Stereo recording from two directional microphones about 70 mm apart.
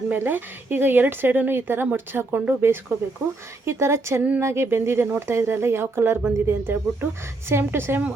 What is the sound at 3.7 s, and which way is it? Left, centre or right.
A woman's voice, right.